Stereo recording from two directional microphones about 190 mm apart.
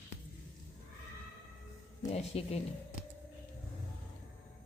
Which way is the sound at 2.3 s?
30° left (ahead or behind).